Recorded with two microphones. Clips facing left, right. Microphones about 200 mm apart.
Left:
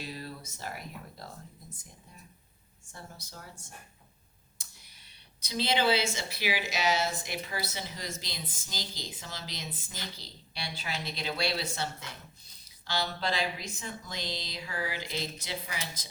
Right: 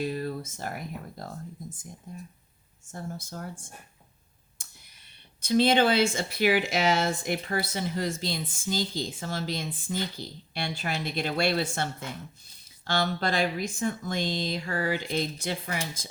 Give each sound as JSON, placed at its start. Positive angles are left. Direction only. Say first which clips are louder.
{"t": 0.0, "sound": "speech", "louder": "right 10 dB", "side_deg": -50}
{"t": 2.9, "sound": "speech", "louder": "right 10 dB", "side_deg": -50}
{"t": 4.6, "sound": "a sound", "louder": "right 2 dB", "side_deg": -50}
{"t": 5.4, "sound": "speech", "louder": "right 8 dB", "side_deg": -50}